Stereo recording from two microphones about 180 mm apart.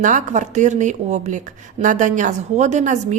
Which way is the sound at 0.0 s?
45° right (ahead or behind).